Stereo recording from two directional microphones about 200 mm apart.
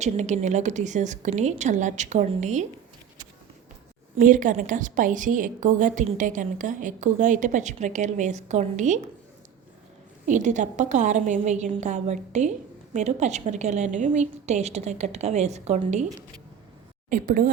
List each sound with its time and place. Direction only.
0.0 s a woman's voice: 35° right (ahead or behind)
4.2 s a woman's voice: 40° right (ahead or behind)
10.2 s a woman's voice: 35° right (ahead or behind)
17.1 s a woman's voice: 45° right (ahead or behind)